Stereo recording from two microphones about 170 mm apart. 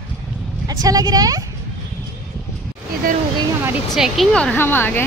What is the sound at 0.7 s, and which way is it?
Speech, 20° right (ahead or behind).